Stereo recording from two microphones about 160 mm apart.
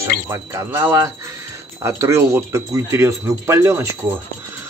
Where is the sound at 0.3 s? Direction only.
15° right (ahead or behind).